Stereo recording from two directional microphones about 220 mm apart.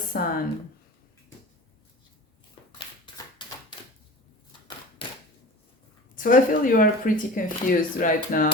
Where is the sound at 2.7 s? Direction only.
20° left (ahead or behind).